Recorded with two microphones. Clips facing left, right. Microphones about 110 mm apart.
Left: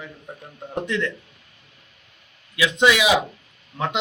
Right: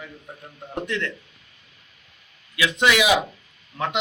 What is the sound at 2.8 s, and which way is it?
Speech, 20° left (ahead or behind).